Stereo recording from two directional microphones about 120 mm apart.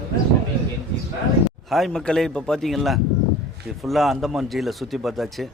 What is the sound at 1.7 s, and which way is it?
Speech, centre (ahead or behind).